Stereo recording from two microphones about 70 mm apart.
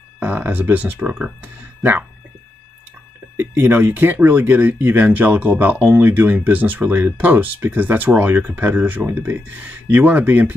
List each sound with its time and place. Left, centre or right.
0.2 s speech: right
3.3 s speech: right